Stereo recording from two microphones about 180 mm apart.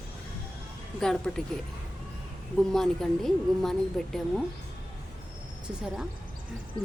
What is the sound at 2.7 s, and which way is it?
A woman's voice, centre (ahead or behind).